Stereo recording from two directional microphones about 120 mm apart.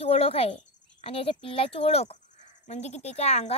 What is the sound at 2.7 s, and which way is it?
Speech, 65° left (ahead or behind).